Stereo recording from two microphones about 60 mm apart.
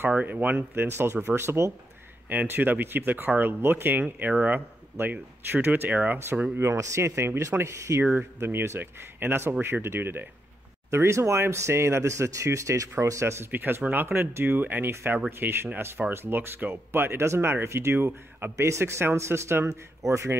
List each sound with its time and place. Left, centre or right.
0.1 s speech: right
2.2 s speech: right
5.9 s speech: right
6.6 s speech: right
8.2 s speech: right
10.9 s speech: right
13.5 s speech: right
19.7 s speech: right